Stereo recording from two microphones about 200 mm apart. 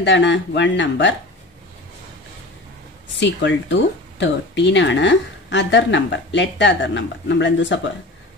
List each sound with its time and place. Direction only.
0.0 s speech: 65° left (ahead or behind)
3.1 s speech: 65° left (ahead or behind)